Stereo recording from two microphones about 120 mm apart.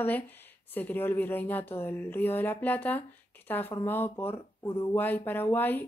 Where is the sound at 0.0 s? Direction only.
15° left (ahead or behind).